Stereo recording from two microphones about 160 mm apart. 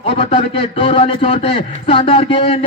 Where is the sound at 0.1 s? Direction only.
35° left (ahead or behind).